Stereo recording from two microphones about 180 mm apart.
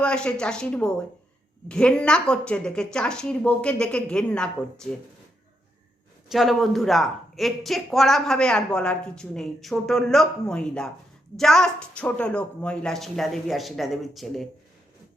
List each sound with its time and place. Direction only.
0.0 s speech: 5° left (ahead or behind)
6.3 s speech: centre (ahead or behind)